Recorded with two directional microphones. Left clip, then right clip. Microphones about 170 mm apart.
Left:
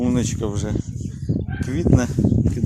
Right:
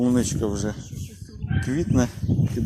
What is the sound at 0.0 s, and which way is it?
Speech, 10° left (ahead or behind).